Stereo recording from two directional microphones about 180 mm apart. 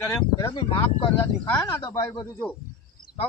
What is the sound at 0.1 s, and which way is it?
A man's voice, 20° left (ahead or behind).